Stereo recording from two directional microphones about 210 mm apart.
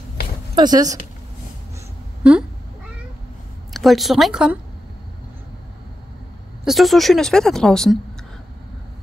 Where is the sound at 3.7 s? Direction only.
Centre (ahead or behind).